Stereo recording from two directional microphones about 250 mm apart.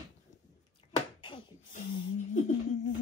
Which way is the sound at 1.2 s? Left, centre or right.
Centre.